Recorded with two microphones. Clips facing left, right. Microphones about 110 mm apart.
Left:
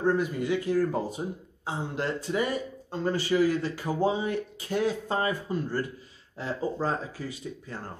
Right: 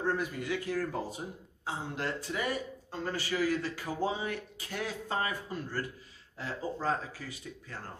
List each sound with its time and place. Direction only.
0.0 s speech: 25° left (ahead or behind)